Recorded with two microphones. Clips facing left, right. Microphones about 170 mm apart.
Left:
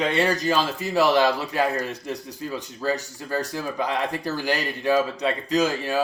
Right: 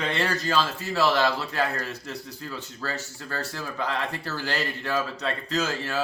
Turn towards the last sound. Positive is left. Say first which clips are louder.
# left 6 dB
turn(degrees=15)  # may be behind; listen again after turning